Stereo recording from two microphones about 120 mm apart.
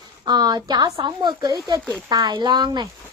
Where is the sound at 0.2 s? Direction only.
35° right (ahead or behind).